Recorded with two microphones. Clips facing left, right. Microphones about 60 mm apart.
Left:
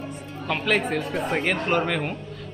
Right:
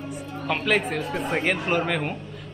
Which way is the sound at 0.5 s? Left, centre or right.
Centre.